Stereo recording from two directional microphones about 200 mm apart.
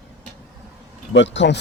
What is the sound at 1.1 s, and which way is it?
Speech, 65° left (ahead or behind).